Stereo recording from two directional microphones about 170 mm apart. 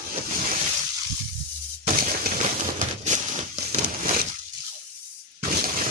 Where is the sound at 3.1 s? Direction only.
45° right (ahead or behind).